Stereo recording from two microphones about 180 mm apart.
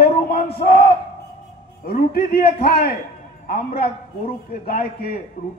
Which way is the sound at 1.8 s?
55° left (ahead or behind).